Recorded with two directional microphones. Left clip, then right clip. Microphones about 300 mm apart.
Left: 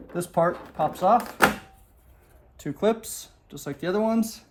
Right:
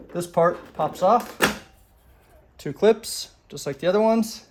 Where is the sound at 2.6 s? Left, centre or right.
Right.